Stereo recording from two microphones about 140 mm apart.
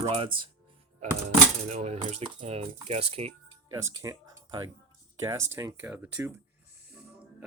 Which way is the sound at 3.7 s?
20° right (ahead or behind).